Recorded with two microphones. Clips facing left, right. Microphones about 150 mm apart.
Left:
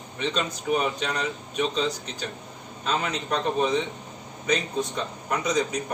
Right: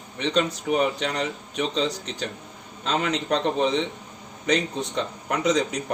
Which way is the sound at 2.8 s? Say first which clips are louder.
Right 3 dB; 90° right.